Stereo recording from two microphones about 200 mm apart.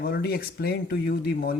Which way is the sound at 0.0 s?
50° left (ahead or behind).